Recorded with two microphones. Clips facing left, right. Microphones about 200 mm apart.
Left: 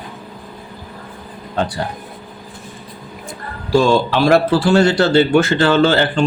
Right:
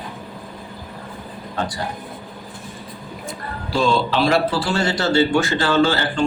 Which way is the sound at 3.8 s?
50° left (ahead or behind).